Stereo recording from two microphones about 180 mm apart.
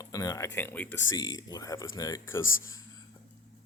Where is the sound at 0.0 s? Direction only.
20° left (ahead or behind).